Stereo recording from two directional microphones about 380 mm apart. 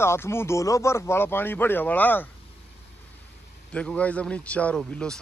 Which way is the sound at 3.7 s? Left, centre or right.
Centre.